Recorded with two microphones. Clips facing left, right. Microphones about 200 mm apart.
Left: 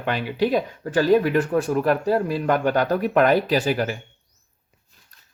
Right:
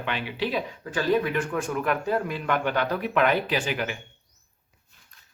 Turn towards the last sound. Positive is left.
turn(degrees=40)  # may be behind; listen again after turning